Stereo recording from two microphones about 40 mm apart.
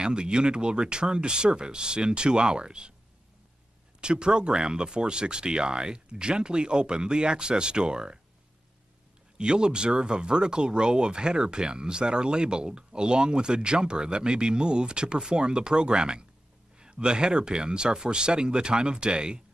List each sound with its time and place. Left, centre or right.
0.0 s speech: right
4.0 s speech: right
9.4 s speech: right